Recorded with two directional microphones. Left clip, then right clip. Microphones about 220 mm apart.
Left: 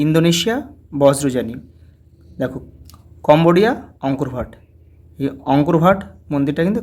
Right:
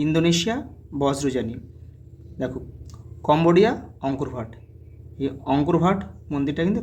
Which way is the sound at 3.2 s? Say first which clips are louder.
Left 5 dB; 25° left (ahead or behind).